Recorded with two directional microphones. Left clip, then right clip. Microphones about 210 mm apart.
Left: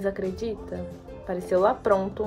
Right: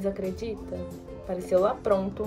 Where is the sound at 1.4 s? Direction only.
15° left (ahead or behind).